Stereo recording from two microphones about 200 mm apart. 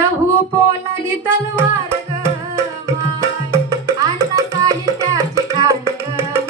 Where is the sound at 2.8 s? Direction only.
15° right (ahead or behind).